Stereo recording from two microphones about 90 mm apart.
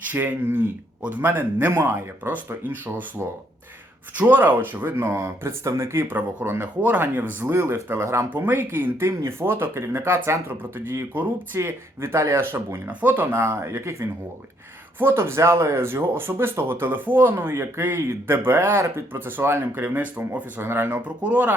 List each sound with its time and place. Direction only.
0.0 s speech: 20° right (ahead or behind)
4.1 s speech: 20° right (ahead or behind)
13.3 s speech: 30° right (ahead or behind)